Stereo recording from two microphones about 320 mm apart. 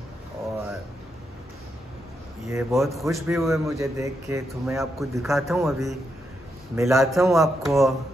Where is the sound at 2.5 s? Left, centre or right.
Centre.